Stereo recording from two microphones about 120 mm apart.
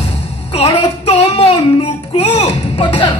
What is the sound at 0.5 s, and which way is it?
Child singing, 60° left (ahead or behind).